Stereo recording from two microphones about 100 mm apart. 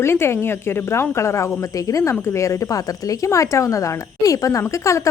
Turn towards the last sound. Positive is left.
turn(degrees=30)  # may be behind; listen again after turning